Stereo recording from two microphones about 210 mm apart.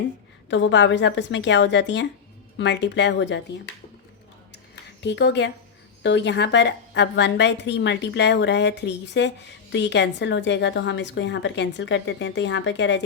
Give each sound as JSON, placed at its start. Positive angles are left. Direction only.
{"t": 0.5, "sound": "a woman's voice", "side_deg": 60}
{"t": 4.7, "sound": "a sound", "side_deg": 55}
{"t": 6.0, "sound": "a woman's voice", "side_deg": 55}